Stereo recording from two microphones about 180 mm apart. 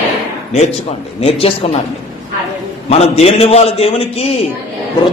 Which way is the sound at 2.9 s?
35° left (ahead or behind).